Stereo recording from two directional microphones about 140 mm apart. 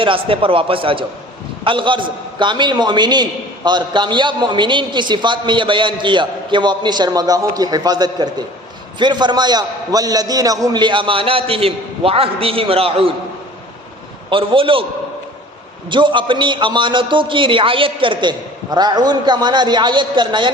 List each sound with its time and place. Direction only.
0.0 s a man's voice: 40° right (ahead or behind)
14.3 s a man's voice: 40° right (ahead or behind)
15.9 s a man's voice: 35° right (ahead or behind)